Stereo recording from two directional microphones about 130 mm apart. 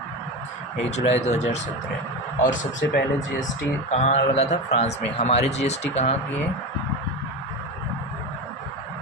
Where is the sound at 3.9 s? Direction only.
60° left (ahead or behind).